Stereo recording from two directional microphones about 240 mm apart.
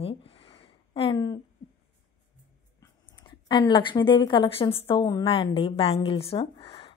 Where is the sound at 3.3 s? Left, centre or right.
Centre.